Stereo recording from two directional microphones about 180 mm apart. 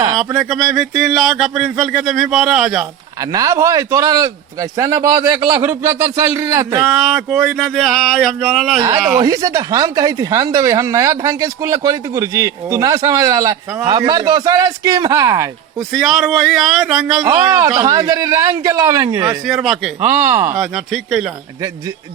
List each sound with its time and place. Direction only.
0.3 s speech: centre (ahead or behind)
3.3 s a man's voice: 20° right (ahead or behind)
6.8 s speech: centre (ahead or behind)
9.1 s speech: 20° right (ahead or behind)
15.9 s speech: centre (ahead or behind)
17.2 s a man's voice: 15° right (ahead or behind)
19.5 s speech: centre (ahead or behind)
20.1 s a man's voice: 15° right (ahead or behind)
20.6 s speech: centre (ahead or behind)